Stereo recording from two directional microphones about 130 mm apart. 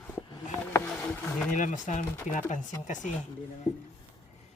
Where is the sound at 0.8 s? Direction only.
5° left (ahead or behind).